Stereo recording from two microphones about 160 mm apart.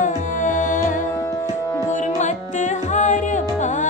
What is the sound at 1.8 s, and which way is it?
Music, 50° left (ahead or behind).